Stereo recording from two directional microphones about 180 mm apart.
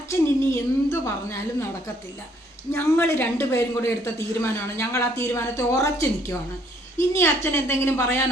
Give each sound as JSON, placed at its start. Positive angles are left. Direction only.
{"t": 0.1, "sound": "a woman's voice", "side_deg": 15}
{"t": 2.7, "sound": "speech", "side_deg": 10}